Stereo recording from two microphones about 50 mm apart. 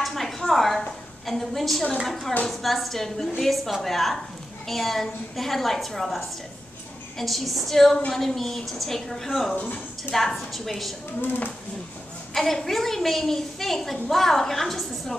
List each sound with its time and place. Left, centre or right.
0.0 s a sound: centre
1.2 s a woman's voice: centre
9.6 s a woman's voice: left
10.1 s a woman's voice: centre
11.1 s speech: left
12.4 s a woman's voice: centre